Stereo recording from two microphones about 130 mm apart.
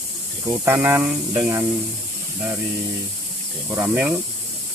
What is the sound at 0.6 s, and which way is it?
Speech, 20° right (ahead or behind).